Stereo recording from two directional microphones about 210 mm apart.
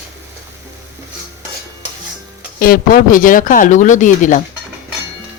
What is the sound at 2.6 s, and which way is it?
Speech, 45° left (ahead or behind).